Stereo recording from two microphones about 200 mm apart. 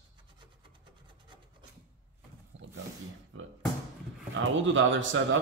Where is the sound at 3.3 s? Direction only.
75° right (ahead or behind).